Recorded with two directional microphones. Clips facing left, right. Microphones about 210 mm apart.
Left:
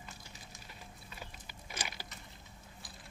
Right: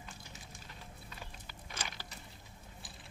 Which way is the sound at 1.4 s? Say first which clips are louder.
Left 1 dB; 10° left (ahead or behind).